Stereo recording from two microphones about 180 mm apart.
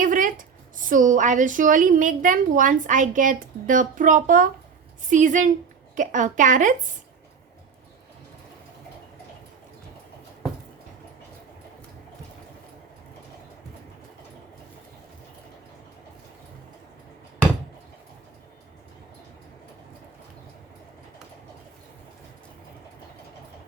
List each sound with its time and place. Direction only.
0.0 s a woman's voice: 50° right (ahead or behind)